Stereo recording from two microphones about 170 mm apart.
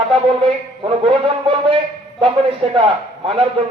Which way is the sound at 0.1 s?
30° right (ahead or behind).